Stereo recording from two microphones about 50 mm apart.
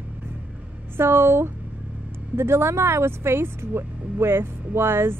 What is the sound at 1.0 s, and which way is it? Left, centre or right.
Speech, right.